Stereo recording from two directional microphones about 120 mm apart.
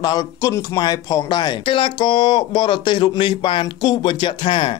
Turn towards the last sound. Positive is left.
turn(degrees=40)  # may be behind; listen again after turning